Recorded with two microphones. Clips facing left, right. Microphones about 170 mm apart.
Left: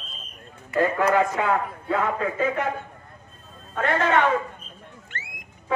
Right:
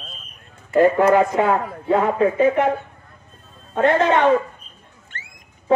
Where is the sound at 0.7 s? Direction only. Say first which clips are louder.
Right 7 dB; 25° right (ahead or behind).